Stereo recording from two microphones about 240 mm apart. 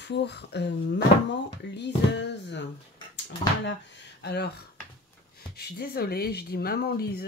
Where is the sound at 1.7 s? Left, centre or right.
Left.